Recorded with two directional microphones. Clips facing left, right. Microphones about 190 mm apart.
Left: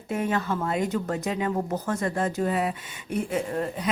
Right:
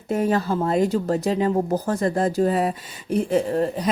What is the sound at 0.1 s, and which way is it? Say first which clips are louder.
Speech: right 5 dB; 35° right (ahead or behind).